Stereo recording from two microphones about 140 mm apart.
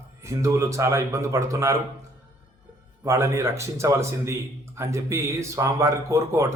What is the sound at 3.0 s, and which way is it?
A man's voice, 20° right (ahead or behind).